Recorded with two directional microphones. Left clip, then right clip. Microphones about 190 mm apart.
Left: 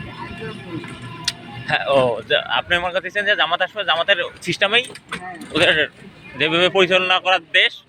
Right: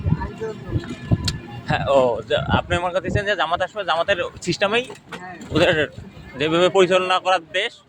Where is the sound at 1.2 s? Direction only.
20° right (ahead or behind).